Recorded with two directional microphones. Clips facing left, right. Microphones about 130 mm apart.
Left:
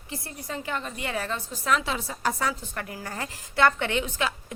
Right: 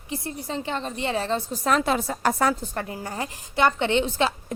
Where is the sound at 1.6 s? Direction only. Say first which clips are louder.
Right 3 dB; 45° right (ahead or behind).